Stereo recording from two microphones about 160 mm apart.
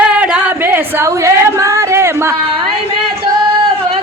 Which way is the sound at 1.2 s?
15° right (ahead or behind).